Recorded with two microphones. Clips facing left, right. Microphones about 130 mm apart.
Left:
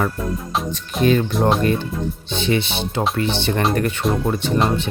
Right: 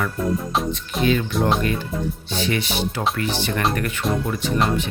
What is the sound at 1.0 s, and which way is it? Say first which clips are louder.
Speech: left 4 dB; 40° left (ahead or behind).